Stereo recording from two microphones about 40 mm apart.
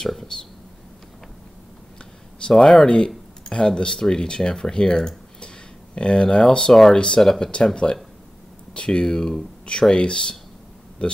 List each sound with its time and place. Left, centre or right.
0.0 s a sound: centre
2.5 s speech: centre
3.4 s speech: left
6.7 s speech: centre
7.7 s speech: left